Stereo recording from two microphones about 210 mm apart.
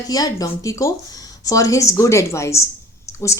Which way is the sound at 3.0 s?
15° left (ahead or behind).